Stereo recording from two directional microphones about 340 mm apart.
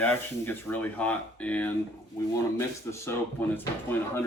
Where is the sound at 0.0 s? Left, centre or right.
Centre.